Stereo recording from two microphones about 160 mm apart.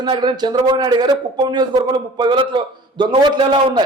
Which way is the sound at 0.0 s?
30° right (ahead or behind).